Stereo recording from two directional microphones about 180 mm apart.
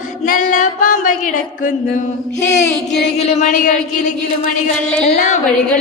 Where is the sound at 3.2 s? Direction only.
40° left (ahead or behind).